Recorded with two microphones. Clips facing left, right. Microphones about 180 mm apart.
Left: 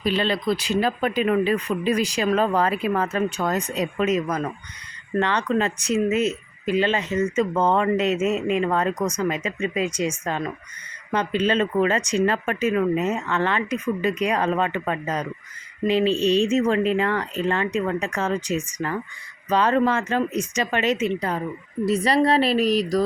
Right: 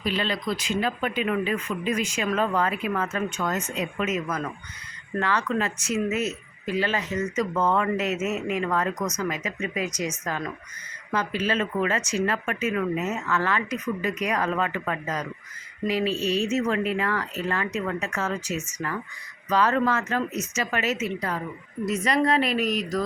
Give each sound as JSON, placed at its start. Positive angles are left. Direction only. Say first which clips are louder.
{"t": 0.0, "sound": "speech", "louder": "left 5 dB", "side_deg": 30}